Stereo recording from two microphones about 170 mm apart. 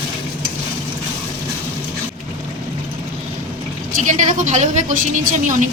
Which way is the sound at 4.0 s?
45° right (ahead or behind).